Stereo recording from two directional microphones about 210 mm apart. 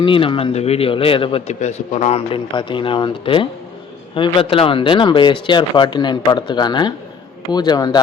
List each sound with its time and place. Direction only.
0.0 s a man's voice: 25° left (ahead or behind)